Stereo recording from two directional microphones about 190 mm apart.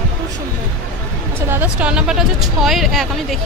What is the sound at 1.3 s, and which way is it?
A woman's voice, 10° right (ahead or behind).